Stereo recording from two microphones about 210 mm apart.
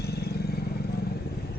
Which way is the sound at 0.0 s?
50° left (ahead or behind).